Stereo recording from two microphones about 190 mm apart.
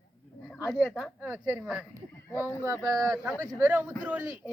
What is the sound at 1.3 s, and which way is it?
Speech, 10° right (ahead or behind).